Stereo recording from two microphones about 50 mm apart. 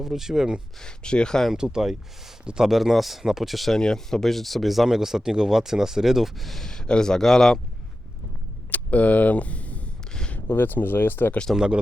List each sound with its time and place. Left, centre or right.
0.0 s speech: centre
0.8 s speech: centre
1.5 s speech: centre
2.4 s speech: centre
2.6 s speech: centre
3.8 s speech: centre
8.7 s a sound: left
10.1 s a sound: centre
10.5 s speech: left
11.5 s speech: centre